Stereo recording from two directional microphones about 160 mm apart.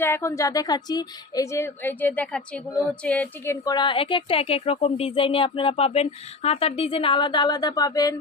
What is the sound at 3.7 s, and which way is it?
Speech, 30° left (ahead or behind).